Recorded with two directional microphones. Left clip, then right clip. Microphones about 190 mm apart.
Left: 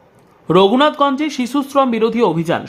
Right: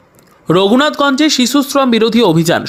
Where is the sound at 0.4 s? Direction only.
20° right (ahead or behind).